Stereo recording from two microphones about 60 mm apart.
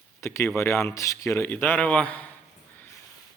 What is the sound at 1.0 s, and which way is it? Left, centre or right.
Speech, left.